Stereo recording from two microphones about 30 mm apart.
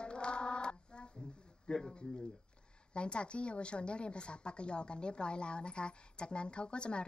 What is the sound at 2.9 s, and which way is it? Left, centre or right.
A woman's voice, left.